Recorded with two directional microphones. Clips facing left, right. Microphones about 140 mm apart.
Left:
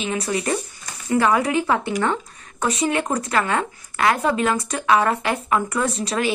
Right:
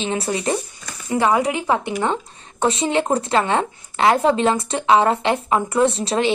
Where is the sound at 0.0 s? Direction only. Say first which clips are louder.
Right 2 dB; 30° right (ahead or behind).